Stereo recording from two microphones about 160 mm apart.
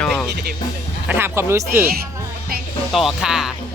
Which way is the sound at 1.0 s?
10° right (ahead or behind).